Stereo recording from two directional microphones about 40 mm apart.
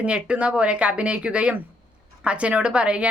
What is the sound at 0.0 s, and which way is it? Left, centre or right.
A woman's voice, right.